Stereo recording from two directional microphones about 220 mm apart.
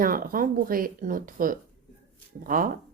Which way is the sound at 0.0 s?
40° right (ahead or behind).